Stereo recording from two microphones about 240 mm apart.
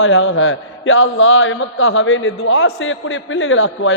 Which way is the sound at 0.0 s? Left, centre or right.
Left.